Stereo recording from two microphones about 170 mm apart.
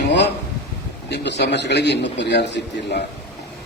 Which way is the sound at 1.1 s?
90° left.